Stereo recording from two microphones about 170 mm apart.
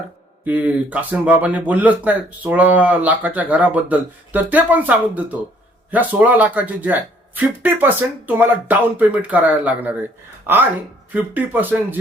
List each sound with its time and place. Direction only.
0.4 s speech: 10° right (ahead or behind)